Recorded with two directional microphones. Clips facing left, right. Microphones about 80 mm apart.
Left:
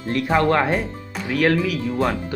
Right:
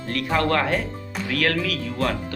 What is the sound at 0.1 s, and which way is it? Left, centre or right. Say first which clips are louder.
Speech: left 4 dB; left.